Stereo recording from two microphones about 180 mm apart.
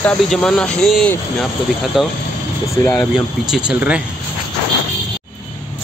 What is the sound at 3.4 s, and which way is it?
Speech, 5° right (ahead or behind).